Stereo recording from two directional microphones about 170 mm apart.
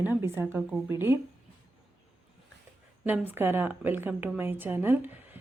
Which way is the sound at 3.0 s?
10° right (ahead or behind).